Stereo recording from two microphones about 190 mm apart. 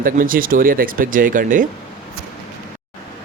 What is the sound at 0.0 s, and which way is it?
Speech, 45° right (ahead or behind).